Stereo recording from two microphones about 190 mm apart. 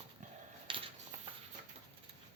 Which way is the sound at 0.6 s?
25° right (ahead or behind).